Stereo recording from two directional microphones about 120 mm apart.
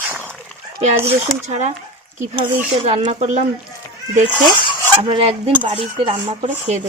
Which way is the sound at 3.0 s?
70° right (ahead or behind).